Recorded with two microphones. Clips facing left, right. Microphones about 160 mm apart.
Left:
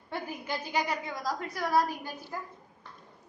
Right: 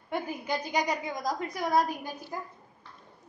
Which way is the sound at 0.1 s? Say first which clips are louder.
Right 4 dB; 15° right (ahead or behind).